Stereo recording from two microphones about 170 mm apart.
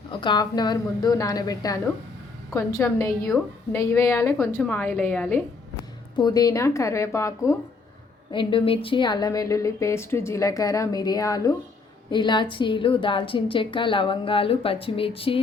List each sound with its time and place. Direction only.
0.1 s a woman's voice: 25° left (ahead or behind); by 5.4 s 10° left (ahead or behind)
6.1 s a woman's voice: 20° left (ahead or behind)
8.3 s a woman's voice: 30° left (ahead or behind)